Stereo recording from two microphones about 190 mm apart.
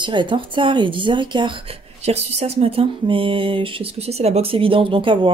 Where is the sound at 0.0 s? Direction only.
25° right (ahead or behind).